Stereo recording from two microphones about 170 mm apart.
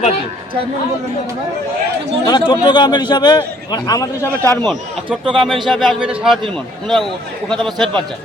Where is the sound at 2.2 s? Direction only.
25° left (ahead or behind).